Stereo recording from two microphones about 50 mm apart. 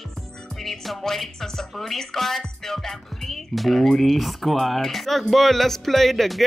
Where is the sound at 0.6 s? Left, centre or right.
Centre.